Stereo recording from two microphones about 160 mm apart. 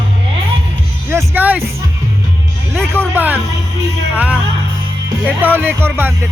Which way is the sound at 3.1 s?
10° right (ahead or behind).